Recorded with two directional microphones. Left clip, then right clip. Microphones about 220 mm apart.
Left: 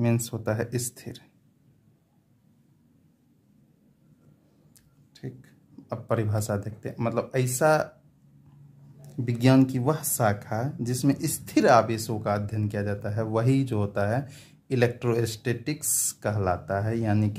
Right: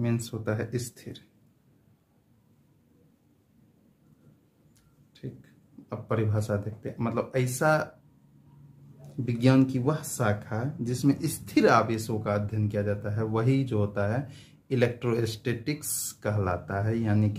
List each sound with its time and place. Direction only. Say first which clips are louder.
0.0 s speech: left 3 dB; 25° left (ahead or behind)
5.9 s speech: left 2 dB; 30° left (ahead or behind)
9.2 s speech: left 2 dB; 30° left (ahead or behind)